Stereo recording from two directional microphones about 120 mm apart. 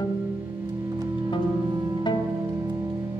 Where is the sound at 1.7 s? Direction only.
35° right (ahead or behind).